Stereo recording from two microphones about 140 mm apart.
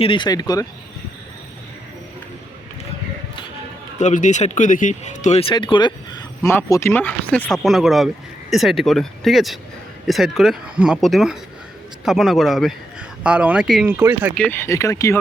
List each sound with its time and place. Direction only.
0.0 s speech: 35° left (ahead or behind)
3.9 s speech: 60° left (ahead or behind)
5.4 s speech: 40° left (ahead or behind)
6.5 s speech: 20° left (ahead or behind)
7.6 s speech: centre (ahead or behind)
13.9 s speech: 15° right (ahead or behind)
14.3 s speech: 10° left (ahead or behind)
14.7 s speech: 25° left (ahead or behind)